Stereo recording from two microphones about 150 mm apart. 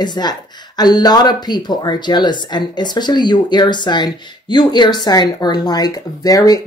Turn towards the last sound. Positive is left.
turn(degrees=25)  # may be behind; listen again after turning